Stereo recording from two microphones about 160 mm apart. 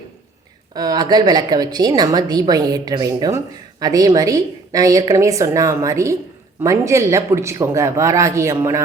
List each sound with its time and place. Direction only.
0.7 s a woman's voice: 25° right (ahead or behind)